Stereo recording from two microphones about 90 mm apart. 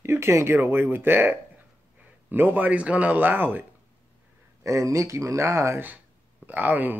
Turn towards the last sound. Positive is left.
turn(degrees=-20)  # may be behind; listen again after turning